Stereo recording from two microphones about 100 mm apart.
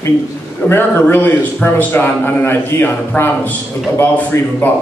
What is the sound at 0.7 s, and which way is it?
A man's voice, 25° left (ahead or behind).